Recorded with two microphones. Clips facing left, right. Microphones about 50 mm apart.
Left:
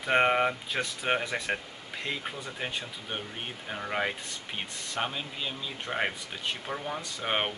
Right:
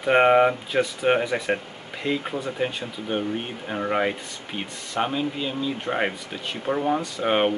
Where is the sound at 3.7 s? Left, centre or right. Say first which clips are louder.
Right 7 dB; centre.